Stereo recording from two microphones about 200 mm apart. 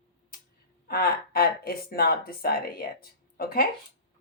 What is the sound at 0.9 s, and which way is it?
Speech, 50° left (ahead or behind).